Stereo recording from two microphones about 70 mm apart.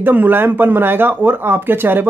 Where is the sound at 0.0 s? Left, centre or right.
Right.